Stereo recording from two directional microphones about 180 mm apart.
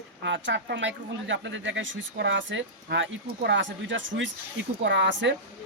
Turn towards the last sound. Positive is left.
turn(degrees=-85)